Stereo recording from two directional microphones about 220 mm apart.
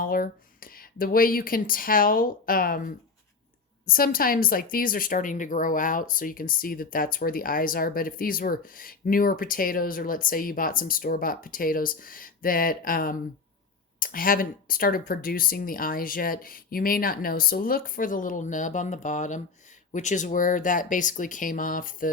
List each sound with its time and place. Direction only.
0.0 s a woman's voice: 40° left (ahead or behind)